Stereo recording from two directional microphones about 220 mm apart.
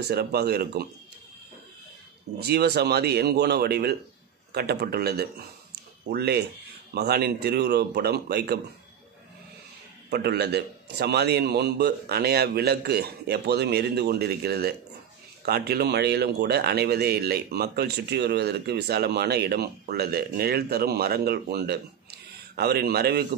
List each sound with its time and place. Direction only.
0.0 s speech: 45° right (ahead or behind)
2.4 s speech: 50° right (ahead or behind)
10.0 s speech: 50° right (ahead or behind)